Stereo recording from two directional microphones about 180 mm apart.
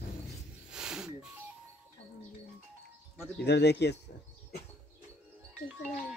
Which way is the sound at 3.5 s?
70° left (ahead or behind).